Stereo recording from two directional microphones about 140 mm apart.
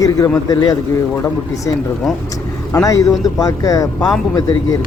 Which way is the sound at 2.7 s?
25° left (ahead or behind).